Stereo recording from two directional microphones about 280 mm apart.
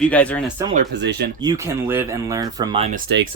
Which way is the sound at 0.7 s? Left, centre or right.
Right.